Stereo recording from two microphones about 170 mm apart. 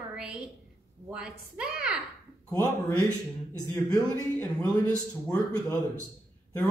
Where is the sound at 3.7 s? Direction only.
20° left (ahead or behind).